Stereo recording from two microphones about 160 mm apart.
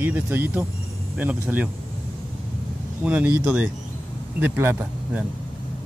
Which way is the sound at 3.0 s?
10° right (ahead or behind).